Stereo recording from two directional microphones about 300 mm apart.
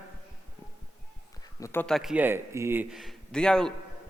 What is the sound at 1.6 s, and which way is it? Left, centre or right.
A man's voice, centre.